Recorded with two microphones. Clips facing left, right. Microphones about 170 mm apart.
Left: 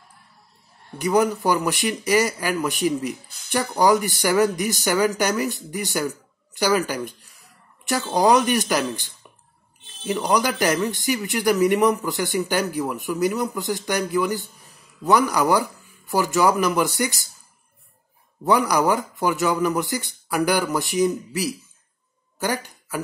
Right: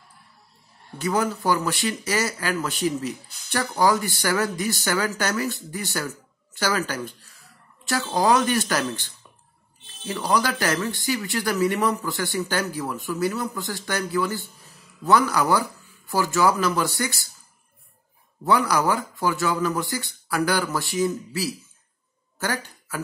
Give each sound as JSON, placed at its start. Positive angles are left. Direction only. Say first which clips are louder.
{"t": 0.9, "sound": "speech", "louder": "left 4 dB", "side_deg": 15}
{"t": 18.4, "sound": "speech", "louder": "left 2 dB", "side_deg": 15}